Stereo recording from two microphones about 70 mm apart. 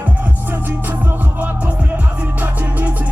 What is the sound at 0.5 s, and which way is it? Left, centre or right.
Music, right.